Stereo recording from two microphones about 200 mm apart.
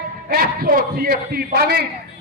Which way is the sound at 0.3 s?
50° right (ahead or behind).